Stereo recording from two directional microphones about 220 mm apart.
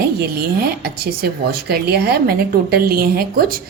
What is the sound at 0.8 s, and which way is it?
A woman's voice, 45° right (ahead or behind).